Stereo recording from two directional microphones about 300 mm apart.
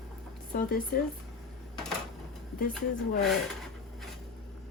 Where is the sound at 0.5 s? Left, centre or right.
Left.